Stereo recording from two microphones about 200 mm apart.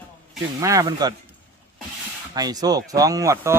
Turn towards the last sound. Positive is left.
turn(degrees=-15)  # may be behind; listen again after turning